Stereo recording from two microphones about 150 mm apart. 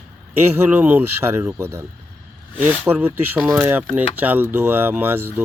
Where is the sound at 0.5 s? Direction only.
15° right (ahead or behind).